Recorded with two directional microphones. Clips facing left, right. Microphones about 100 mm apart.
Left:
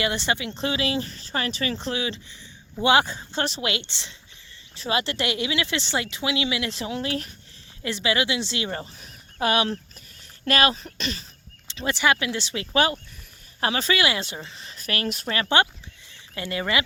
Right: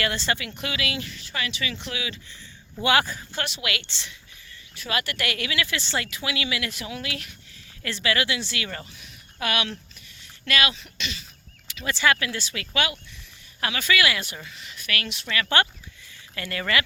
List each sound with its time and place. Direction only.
0.0 s speech: 20° left (ahead or behind)
7.8 s speech: 20° left (ahead or behind); by 11.3 s 40° left (ahead or behind)
11.7 s speech: 25° left (ahead or behind)
12.7 s speech: 35° left (ahead or behind)
15.4 s speech: 20° left (ahead or behind)